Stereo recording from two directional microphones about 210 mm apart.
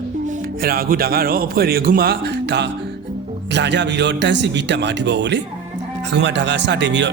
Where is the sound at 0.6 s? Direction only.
45° right (ahead or behind).